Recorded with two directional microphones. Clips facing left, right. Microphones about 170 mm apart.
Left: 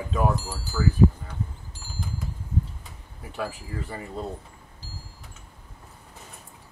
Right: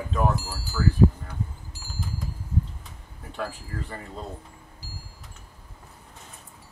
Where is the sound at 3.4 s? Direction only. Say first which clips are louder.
Left 1 dB; 5° left (ahead or behind).